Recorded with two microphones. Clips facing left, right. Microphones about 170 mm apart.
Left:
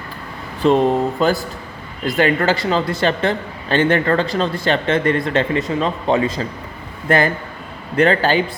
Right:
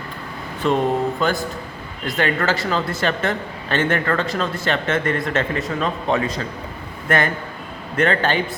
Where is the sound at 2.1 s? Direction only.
35° left (ahead or behind).